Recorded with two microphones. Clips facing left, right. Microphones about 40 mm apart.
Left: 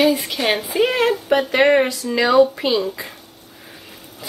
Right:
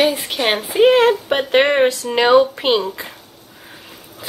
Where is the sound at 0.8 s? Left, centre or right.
Right.